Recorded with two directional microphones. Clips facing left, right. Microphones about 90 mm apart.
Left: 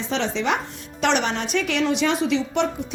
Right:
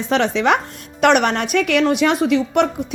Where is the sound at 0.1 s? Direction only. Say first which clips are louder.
Right 7 dB; 60° right (ahead or behind).